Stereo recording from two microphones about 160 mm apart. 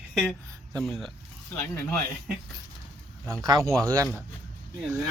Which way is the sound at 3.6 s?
Centre (ahead or behind).